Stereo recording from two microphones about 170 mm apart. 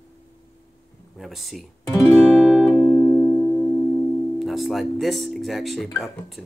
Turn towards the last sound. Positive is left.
turn(degrees=0)  # may be behind; listen again after turning